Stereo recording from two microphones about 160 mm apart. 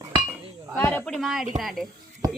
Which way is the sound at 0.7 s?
10° left (ahead or behind).